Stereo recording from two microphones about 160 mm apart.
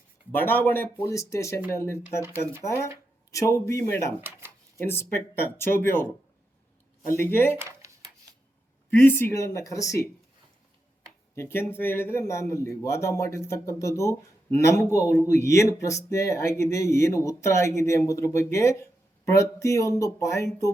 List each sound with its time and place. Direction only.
0.3 s a man's voice: 10° left (ahead or behind)
3.3 s speech: 20° left (ahead or behind)
4.2 s speech: 15° right (ahead or behind)
4.9 s a man's voice: 15° left (ahead or behind)
7.2 s a man's voice: 15° left (ahead or behind)
7.6 s a sound: 20° right (ahead or behind)
8.9 s speech: 15° left (ahead or behind)
11.3 s a man's voice: 15° left (ahead or behind)